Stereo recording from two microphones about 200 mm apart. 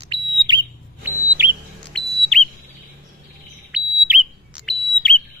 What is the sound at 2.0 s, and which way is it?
Whistle, 5° left (ahead or behind).